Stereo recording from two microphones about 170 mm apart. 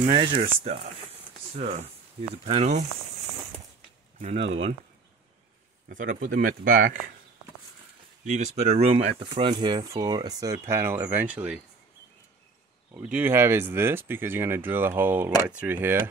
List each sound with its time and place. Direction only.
0.1 s speech: 30° right (ahead or behind)
4.2 s speech: 40° right (ahead or behind)
5.9 s speech: 55° right (ahead or behind)
8.3 s speech: 45° right (ahead or behind); by 11.6 s 5° right (ahead or behind)
12.9 s speech: 10° right (ahead or behind)